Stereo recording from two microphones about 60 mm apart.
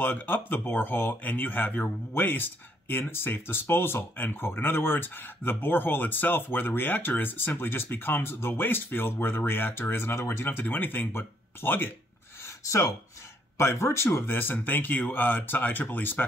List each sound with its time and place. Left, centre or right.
0.0 s speech: left
12.4 s a sound: left
13.6 s speech: left